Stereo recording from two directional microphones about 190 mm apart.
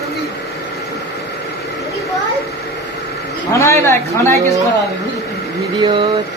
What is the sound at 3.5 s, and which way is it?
Speech, 15° left (ahead or behind).